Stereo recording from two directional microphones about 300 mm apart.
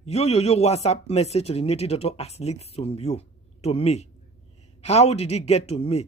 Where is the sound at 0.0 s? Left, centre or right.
Left.